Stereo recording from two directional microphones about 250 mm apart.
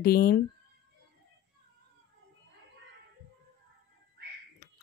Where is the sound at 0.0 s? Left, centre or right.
Left.